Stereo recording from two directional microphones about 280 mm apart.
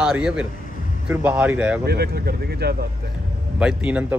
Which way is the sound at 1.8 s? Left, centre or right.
Right.